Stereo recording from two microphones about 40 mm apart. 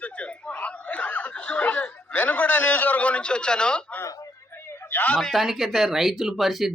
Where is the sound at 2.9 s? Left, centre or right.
Left.